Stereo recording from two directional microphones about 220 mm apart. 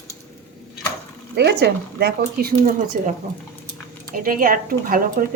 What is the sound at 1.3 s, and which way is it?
A woman's voice, 50° right (ahead or behind).